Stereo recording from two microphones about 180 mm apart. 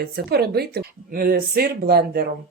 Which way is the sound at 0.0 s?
60° right (ahead or behind).